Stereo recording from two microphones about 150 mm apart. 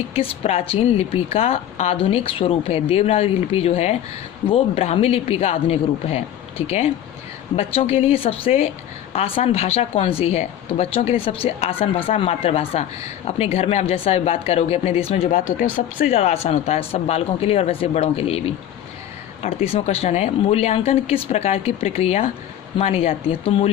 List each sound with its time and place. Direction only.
0.1 s speech: 40° left (ahead or behind)
16.1 s speech: 45° left (ahead or behind)